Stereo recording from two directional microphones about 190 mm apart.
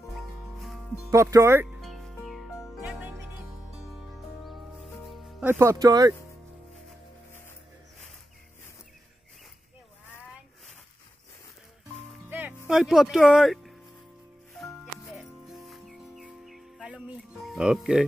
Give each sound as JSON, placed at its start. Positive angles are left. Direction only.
{"t": 1.1, "sound": "speech", "side_deg": -15}
{"t": 1.8, "sound": "music", "side_deg": 0}
{"t": 5.0, "sound": "music", "side_deg": 0}
{"t": 5.5, "sound": "speech", "side_deg": -15}
{"t": 12.3, "sound": "music", "side_deg": -10}
{"t": 12.6, "sound": "speech", "side_deg": 0}
{"t": 14.6, "sound": "music", "side_deg": 0}